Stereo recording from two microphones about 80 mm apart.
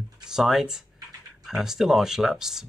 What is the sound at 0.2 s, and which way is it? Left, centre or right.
Speech, centre.